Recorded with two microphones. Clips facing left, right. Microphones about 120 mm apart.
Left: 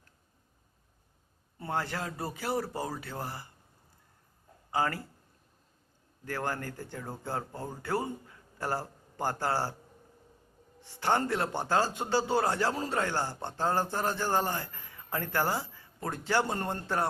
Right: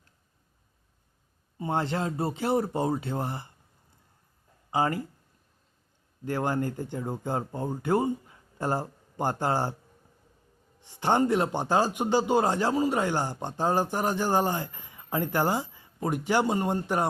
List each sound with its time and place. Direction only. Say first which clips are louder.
1.5 s speech: right 5 dB; 20° right (ahead or behind)
4.7 s a man's voice: right 4 dB; 20° right (ahead or behind)
6.2 s speech: right 6 dB; 20° right (ahead or behind)
10.8 s a man's voice: right 4 dB; 15° right (ahead or behind)